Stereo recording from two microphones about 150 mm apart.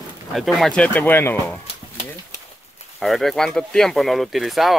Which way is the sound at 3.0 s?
Centre (ahead or behind).